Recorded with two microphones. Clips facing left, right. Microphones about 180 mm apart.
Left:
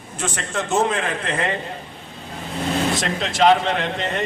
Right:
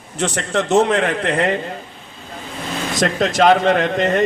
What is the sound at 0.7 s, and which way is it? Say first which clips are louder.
Speech: right 5 dB; 70° right (ahead or behind).